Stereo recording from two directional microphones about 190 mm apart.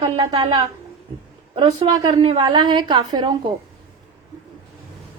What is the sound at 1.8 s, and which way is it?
A woman's voice, 25° right (ahead or behind).